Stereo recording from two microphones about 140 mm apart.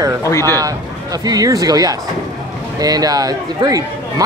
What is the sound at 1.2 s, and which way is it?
Speech, 25° right (ahead or behind).